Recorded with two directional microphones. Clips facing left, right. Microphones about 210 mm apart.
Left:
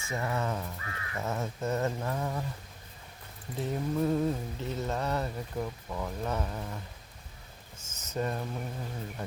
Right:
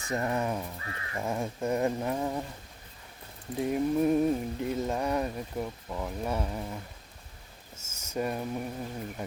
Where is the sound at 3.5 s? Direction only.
15° right (ahead or behind).